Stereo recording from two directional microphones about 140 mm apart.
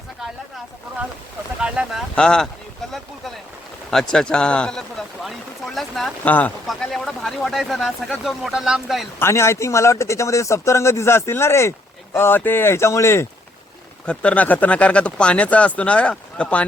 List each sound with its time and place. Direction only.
1.6 s speech: 5° right (ahead or behind)
2.9 s a sound: centre (ahead or behind)
3.9 s speech: 5° left (ahead or behind)
9.1 s speech: 20° left (ahead or behind)
14.0 s speech: 10° left (ahead or behind)